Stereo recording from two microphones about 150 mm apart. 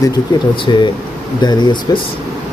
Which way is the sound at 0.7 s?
30° left (ahead or behind).